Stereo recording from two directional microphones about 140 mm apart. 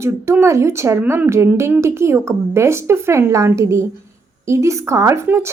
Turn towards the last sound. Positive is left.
turn(degrees=-20)  # may be behind; listen again after turning